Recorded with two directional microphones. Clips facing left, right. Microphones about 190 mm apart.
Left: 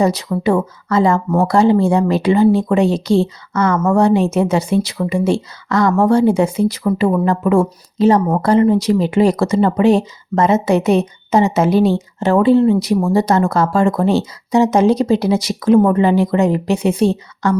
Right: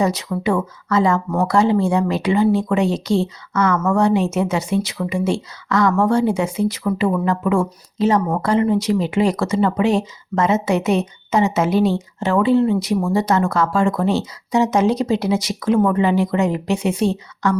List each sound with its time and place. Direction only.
0.0 s speech: 35° left (ahead or behind)